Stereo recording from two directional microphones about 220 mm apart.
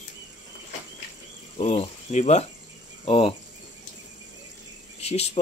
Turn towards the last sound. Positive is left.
turn(degrees=30)  # may be behind; listen again after turning